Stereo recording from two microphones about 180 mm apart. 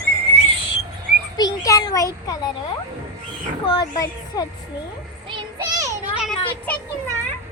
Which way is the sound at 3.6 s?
20° left (ahead or behind).